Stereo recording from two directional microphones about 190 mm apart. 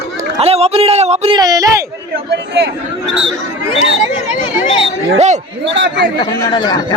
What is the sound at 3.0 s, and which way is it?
Speech, 75° right (ahead or behind).